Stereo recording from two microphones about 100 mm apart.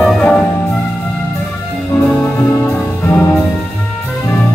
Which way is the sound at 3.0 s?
25° left (ahead or behind).